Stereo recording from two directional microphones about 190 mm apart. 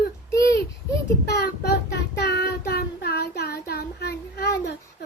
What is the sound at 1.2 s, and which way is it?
Child singing, 60° left (ahead or behind).